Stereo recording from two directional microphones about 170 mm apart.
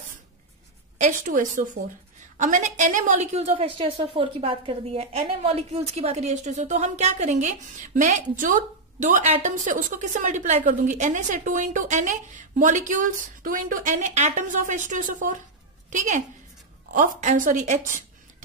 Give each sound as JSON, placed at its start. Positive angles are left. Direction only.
{"t": 0.9, "sound": "a woman's voice", "side_deg": -50}